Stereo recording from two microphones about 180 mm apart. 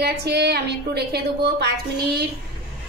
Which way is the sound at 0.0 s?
65° right (ahead or behind).